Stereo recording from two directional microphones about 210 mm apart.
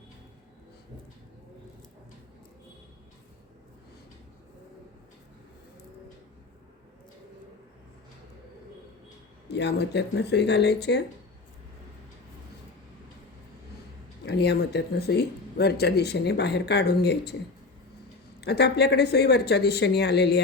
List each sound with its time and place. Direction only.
9.5 s speech: 55° left (ahead or behind)
14.3 s speech: 50° left (ahead or behind)
18.3 s speech: 50° left (ahead or behind)